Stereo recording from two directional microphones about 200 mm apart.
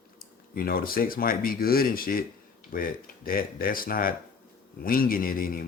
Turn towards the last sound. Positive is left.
turn(degrees=45)  # may be behind; listen again after turning